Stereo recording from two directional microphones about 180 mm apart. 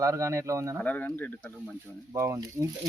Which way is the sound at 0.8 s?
10° left (ahead or behind).